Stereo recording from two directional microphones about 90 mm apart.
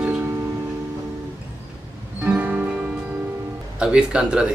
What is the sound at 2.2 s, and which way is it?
Music, 20° right (ahead or behind).